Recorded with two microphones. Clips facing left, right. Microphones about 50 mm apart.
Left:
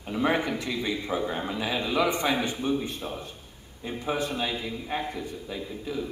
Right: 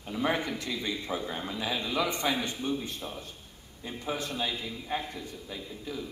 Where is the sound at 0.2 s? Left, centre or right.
Left.